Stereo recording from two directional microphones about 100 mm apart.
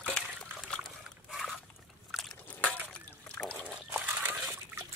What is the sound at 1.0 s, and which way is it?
Dog, centre (ahead or behind).